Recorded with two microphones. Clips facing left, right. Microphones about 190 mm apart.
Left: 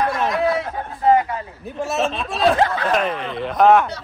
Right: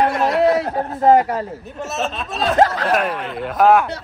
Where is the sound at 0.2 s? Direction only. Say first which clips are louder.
Right 4 dB; 40° right (ahead or behind).